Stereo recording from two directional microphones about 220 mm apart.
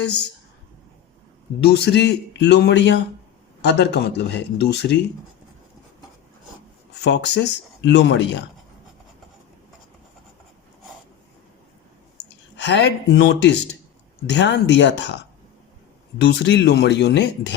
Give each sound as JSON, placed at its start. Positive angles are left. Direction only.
{"t": 0.0, "sound": "speech", "side_deg": 50}
{"t": 1.7, "sound": "speech", "side_deg": 50}
{"t": 7.0, "sound": "speech", "side_deg": 50}
{"t": 12.6, "sound": "speech", "side_deg": 50}
{"t": 16.1, "sound": "speech", "side_deg": 50}